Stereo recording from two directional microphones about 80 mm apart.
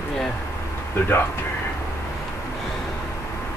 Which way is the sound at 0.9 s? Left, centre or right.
Left.